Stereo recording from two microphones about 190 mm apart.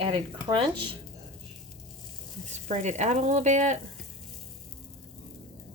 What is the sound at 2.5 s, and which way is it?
Speech, 35° right (ahead or behind).